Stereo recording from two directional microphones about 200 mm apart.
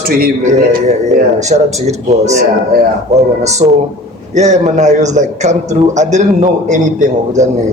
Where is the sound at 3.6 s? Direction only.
35° right (ahead or behind).